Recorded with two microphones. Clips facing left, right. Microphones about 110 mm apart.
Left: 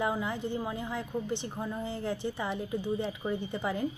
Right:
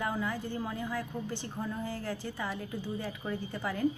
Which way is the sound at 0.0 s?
20° left (ahead or behind).